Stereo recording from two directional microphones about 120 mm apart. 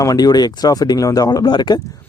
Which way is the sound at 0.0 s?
30° left (ahead or behind).